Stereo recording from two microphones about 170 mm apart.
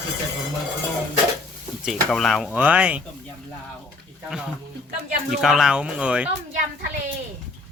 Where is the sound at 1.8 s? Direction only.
Centre (ahead or behind).